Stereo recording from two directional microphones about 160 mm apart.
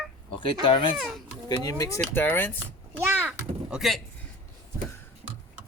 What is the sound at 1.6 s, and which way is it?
Speech, 20° left (ahead or behind).